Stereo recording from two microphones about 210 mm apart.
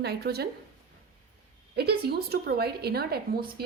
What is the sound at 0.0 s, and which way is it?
Speech, 50° right (ahead or behind).